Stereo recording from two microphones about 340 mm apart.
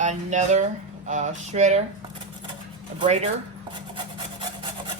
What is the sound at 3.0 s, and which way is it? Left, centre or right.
Speech, centre.